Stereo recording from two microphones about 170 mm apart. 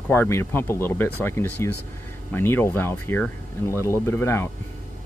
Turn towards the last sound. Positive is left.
turn(degrees=15)  # may be behind; listen again after turning